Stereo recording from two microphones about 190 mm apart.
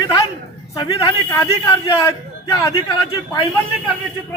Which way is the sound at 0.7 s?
20° left (ahead or behind).